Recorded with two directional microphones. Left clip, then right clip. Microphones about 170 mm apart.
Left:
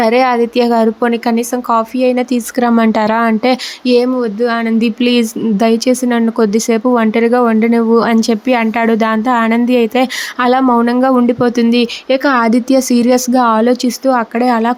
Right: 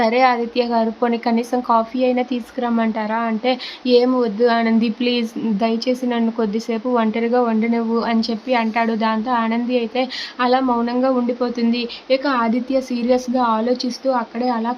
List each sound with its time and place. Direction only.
0.0 s speech: 35° left (ahead or behind)
2.6 s speech: 45° left (ahead or behind)